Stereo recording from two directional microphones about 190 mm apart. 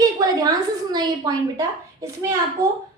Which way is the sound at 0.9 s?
20° right (ahead or behind).